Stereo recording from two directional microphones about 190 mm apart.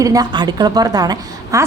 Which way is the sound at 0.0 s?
20° right (ahead or behind).